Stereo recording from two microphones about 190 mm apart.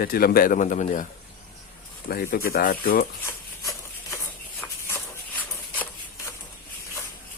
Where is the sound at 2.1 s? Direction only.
50° left (ahead or behind).